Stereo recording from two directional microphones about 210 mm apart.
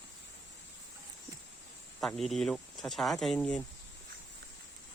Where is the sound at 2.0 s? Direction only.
Centre (ahead or behind).